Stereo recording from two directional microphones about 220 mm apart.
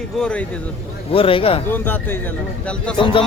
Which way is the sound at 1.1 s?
25° left (ahead or behind).